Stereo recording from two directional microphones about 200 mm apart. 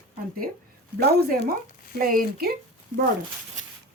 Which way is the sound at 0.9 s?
50° right (ahead or behind).